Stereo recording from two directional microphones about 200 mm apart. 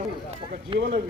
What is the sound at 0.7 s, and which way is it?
Speech, 25° right (ahead or behind).